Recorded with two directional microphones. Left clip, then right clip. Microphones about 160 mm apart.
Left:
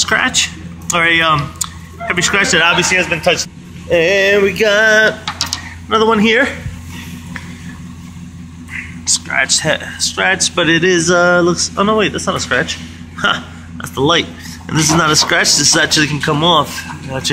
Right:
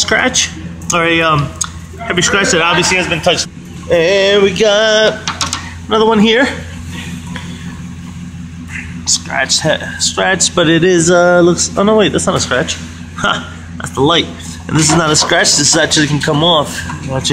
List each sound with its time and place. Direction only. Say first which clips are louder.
0.0 s speech: right 1 dB; 5° right (ahead or behind)
3.9 s music: right 1 dB; centre (ahead or behind)
5.9 s speech: right 1 dB; 10° right (ahead or behind)
8.7 s a man's voice: right 1 dB; 5° right (ahead or behind)